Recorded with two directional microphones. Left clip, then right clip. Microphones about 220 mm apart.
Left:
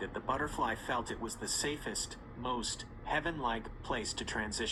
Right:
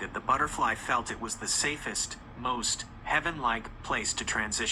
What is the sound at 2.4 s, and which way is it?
Speech, 30° right (ahead or behind).